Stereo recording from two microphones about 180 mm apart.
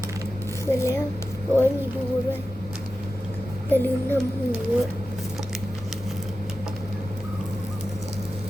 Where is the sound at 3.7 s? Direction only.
10° left (ahead or behind).